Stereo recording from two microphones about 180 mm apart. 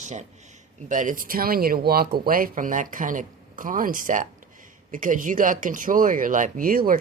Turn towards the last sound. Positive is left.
turn(degrees=-50)  # may be behind; listen again after turning